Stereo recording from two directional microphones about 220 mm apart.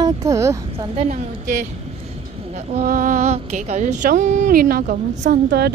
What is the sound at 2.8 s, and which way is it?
Speech, 40° right (ahead or behind).